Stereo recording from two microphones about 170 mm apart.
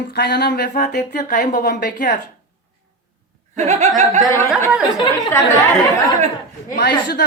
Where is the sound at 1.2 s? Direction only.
55° left (ahead or behind); by 1.9 s 80° left.